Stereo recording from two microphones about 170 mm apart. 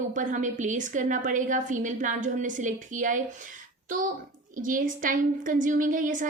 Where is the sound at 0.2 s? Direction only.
50° right (ahead or behind).